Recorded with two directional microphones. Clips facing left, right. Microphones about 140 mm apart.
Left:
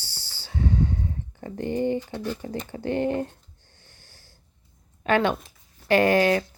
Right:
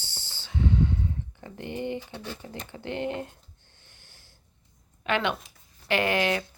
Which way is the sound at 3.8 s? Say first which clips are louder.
Left 3 dB; 40° left (ahead or behind).